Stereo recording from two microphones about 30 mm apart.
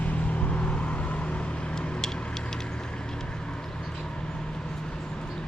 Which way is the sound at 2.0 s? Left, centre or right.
Left.